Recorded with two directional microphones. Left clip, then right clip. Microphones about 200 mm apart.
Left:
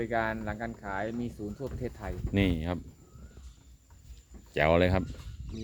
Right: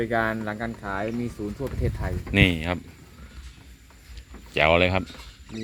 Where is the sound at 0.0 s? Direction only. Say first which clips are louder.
Right 6 dB; 35° right (ahead or behind).